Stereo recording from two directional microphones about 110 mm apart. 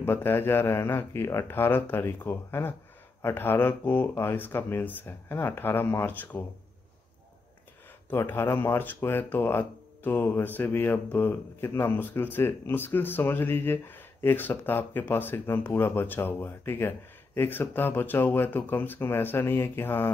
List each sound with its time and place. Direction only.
0.0 s speech: 20° left (ahead or behind)
8.1 s speech: 20° left (ahead or behind)